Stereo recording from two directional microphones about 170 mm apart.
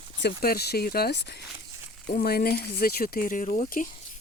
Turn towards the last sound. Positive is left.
turn(degrees=50)  # may be behind; listen again after turning